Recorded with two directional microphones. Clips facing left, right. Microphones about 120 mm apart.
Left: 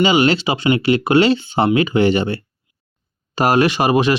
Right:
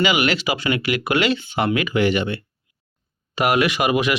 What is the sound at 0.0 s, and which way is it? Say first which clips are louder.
Speech: left 5 dB; 30° left (ahead or behind).